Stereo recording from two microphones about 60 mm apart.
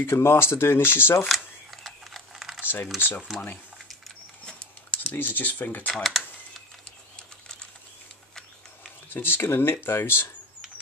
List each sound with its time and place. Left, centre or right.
0.0 s speech: left
1.2 s typing: centre
2.6 s a sound: left
4.5 s a sound: centre
5.1 s speech: left
7.2 s bird: centre
9.1 s speech: left